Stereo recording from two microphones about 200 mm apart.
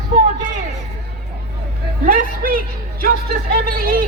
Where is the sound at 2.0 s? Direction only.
45° right (ahead or behind).